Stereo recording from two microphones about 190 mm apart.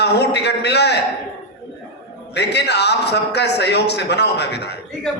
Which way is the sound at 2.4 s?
60° left (ahead or behind).